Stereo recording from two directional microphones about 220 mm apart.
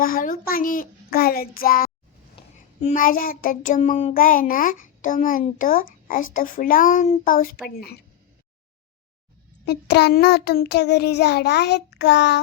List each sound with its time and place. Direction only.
0.0 s a child's voice: 40° left (ahead or behind)
2.3 s child singing: 35° left (ahead or behind)
6.3 s a child's voice: 40° left (ahead or behind)
7.7 s child singing: 45° left (ahead or behind)
9.6 s child singing: 50° left (ahead or behind)